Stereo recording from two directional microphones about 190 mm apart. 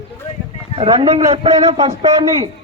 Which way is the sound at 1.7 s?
20° right (ahead or behind).